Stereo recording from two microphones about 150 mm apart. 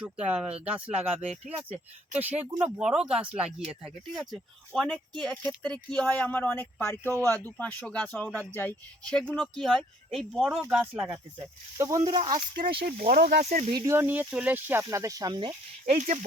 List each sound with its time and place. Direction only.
0.0 s speech: 5° right (ahead or behind)
12.3 s speech: 30° right (ahead or behind)
12.6 s speech: 80° right
13.4 s speech: 55° right (ahead or behind)
13.7 s speech: 20° right (ahead or behind); by 16.2 s 45° right (ahead or behind)